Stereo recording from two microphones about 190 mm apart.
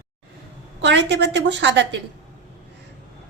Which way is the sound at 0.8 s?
65° right (ahead or behind).